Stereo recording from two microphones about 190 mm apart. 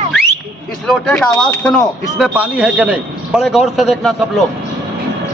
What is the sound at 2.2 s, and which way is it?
A man's voice, 5° right (ahead or behind).